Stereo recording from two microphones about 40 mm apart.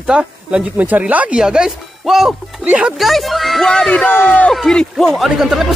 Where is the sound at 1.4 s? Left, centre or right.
Centre.